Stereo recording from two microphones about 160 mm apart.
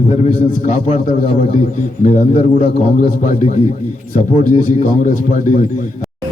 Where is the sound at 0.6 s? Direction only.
45° left (ahead or behind).